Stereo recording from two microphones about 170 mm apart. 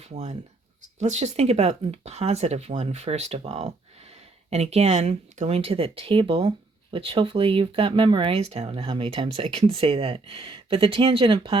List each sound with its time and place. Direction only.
0.0 s speech: 40° right (ahead or behind)